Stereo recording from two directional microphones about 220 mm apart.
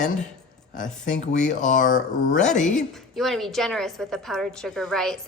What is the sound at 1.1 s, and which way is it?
Speech, 35° left (ahead or behind).